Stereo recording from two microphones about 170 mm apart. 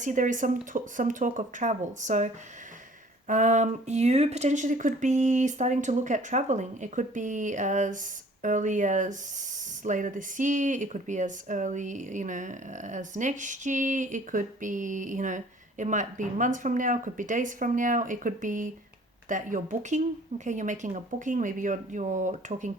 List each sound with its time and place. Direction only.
0.0 s speech: 50° right (ahead or behind)